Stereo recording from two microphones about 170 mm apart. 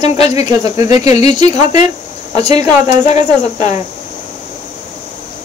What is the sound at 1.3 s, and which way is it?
Speech, 25° right (ahead or behind).